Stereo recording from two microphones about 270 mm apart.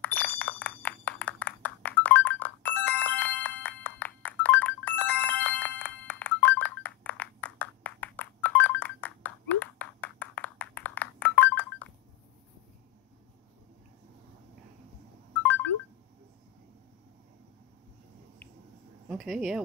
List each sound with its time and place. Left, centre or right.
0.0 s a sound: centre
15.3 s ringtone: centre
19.0 s speech: centre